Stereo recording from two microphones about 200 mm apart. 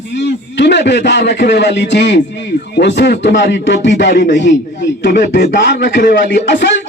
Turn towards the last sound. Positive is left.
turn(degrees=60)  # may be behind; listen again after turning